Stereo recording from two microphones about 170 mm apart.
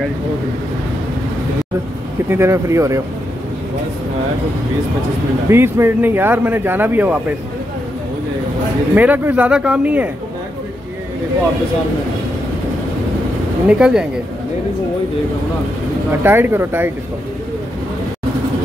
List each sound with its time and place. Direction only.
2.2 s speech: 15° right (ahead or behind)
5.5 s speech: 15° right (ahead or behind)
8.9 s speech: 10° right (ahead or behind)
13.7 s speech: 5° right (ahead or behind)
16.1 s speech: 10° right (ahead or behind)